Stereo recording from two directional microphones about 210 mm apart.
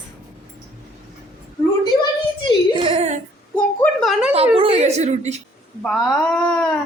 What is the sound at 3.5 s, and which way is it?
Speech, 5° left (ahead or behind).